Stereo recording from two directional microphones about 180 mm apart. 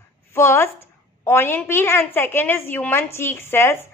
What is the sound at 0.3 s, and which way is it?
A woman's voice, 15° left (ahead or behind).